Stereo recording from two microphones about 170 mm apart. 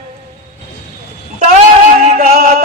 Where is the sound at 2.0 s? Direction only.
45° right (ahead or behind).